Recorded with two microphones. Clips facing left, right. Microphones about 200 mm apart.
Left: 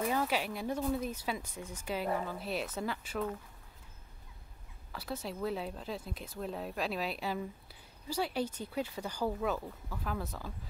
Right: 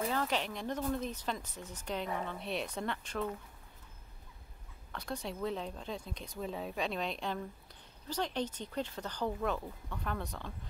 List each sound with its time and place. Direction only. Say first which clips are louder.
0.1 s speech: left 2 dB; 10° left (ahead or behind)
4.9 s speech: even; 5° left (ahead or behind)